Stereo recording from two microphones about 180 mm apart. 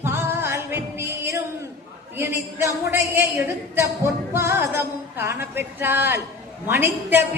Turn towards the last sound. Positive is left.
turn(degrees=-15)  # may be behind; listen again after turning